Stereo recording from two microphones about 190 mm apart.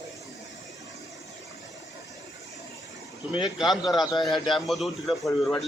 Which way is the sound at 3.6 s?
20° left (ahead or behind).